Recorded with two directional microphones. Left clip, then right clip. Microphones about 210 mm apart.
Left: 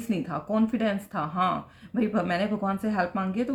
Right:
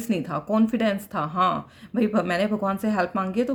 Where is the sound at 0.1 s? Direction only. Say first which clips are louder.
Right 3 dB; 45° right (ahead or behind).